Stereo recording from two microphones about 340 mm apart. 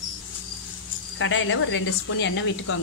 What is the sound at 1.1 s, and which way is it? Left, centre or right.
Speech, left.